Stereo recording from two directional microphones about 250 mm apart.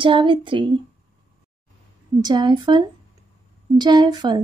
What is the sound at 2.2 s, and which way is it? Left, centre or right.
Speech, centre.